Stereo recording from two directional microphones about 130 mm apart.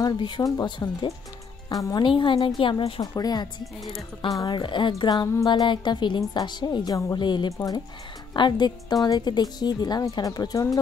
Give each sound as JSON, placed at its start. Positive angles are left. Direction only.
{"t": 0.0, "sound": "a woman's voice", "side_deg": 30}
{"t": 2.0, "sound": "a woman's voice", "side_deg": 40}
{"t": 3.0, "sound": "a woman's voice", "side_deg": 30}